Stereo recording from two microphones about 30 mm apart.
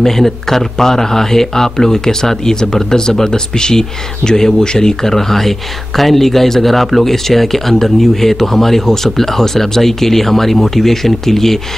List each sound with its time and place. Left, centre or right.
0.0 s speech: centre